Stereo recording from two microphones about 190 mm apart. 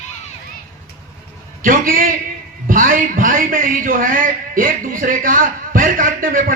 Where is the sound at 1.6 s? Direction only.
45° right (ahead or behind).